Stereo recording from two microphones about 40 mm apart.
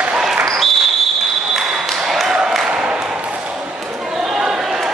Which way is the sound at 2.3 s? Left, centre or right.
Centre.